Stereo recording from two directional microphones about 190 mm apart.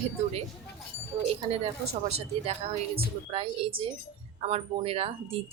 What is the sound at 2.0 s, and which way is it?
A woman's voice, 35° right (ahead or behind).